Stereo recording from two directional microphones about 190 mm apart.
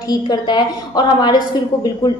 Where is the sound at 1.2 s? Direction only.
20° left (ahead or behind).